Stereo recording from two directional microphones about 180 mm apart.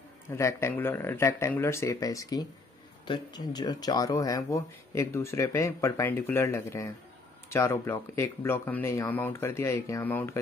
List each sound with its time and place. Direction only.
0.4 s speech: 15° left (ahead or behind)